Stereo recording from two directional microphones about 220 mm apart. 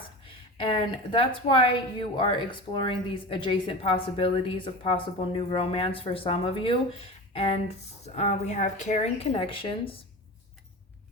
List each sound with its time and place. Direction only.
1.1 s a woman's voice: 25° left (ahead or behind)